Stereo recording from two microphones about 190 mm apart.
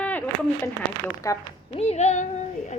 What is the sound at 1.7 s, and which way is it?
Speech, 35° left (ahead or behind).